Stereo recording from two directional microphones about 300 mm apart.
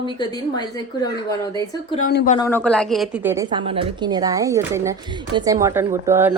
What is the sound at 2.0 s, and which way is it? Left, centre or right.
Speech, left.